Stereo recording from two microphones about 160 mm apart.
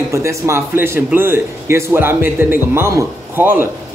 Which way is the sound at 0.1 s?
20° right (ahead or behind).